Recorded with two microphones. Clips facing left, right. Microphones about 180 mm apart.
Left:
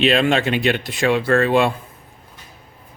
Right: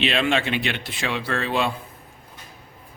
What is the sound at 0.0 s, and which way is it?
Speech, 45° left (ahead or behind).